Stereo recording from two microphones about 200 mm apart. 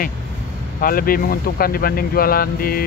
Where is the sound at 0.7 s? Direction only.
45° left (ahead or behind).